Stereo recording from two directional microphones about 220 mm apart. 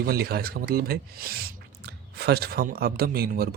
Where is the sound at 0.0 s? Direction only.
45° right (ahead or behind).